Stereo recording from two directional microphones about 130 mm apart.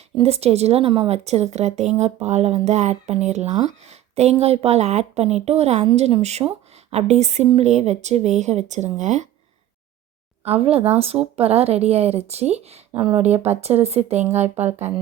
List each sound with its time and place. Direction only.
0.2 s speech: 50° right (ahead or behind)
10.4 s speech: 50° right (ahead or behind)